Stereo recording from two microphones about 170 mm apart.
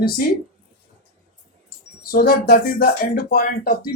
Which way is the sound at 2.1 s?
60° left (ahead or behind).